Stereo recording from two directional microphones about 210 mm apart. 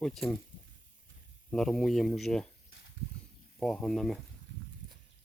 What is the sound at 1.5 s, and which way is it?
Speech, 5° left (ahead or behind).